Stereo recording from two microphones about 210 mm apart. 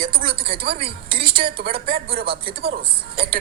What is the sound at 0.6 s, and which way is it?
Speech, 50° right (ahead or behind).